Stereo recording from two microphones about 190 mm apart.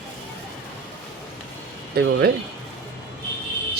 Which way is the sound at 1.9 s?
55° right (ahead or behind).